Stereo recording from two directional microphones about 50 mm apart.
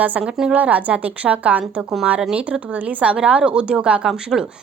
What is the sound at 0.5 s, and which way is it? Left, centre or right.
A woman's voice, right.